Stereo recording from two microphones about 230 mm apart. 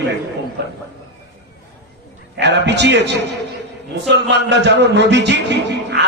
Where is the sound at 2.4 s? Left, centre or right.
Right.